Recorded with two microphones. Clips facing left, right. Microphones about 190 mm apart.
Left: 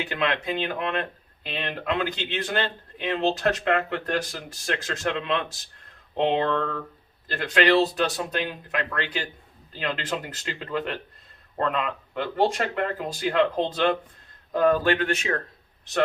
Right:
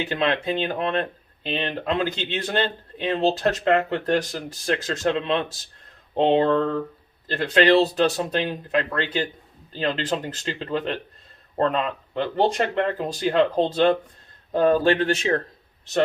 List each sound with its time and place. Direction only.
0.1 s a man's voice: 30° right (ahead or behind)